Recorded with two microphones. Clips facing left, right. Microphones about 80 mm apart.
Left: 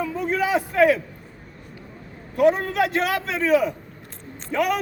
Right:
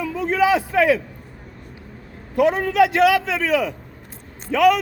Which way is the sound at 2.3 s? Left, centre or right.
Right.